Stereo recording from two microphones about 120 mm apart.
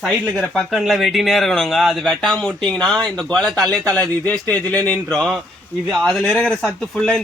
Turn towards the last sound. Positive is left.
turn(degrees=5)  # may be behind; listen again after turning